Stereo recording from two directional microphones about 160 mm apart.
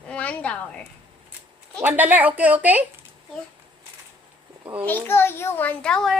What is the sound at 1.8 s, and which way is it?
A woman's voice, 10° right (ahead or behind).